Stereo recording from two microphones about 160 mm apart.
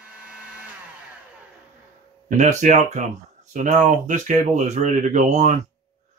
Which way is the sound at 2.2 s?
50° right (ahead or behind).